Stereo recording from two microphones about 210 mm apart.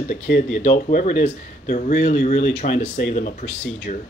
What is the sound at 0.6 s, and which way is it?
Speech, 35° left (ahead or behind).